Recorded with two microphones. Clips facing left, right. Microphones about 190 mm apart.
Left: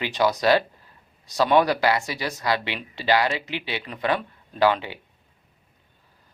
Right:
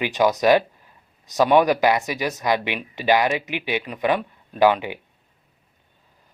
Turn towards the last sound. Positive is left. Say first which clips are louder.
# right 3 dB
turn(degrees=-15)  # may be behind; listen again after turning